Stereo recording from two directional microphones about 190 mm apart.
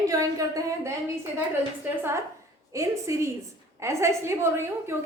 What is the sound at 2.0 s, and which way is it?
A woman's voice, 15° right (ahead or behind).